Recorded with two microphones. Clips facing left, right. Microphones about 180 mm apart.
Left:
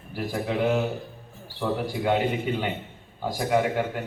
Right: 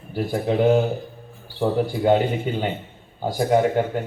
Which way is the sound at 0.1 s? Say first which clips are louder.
Right 5 dB; 30° right (ahead or behind).